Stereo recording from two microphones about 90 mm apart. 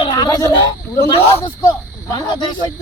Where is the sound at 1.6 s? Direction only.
40° left (ahead or behind).